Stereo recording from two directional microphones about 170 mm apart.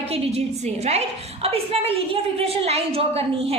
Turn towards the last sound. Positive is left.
turn(degrees=-35)  # may be behind; listen again after turning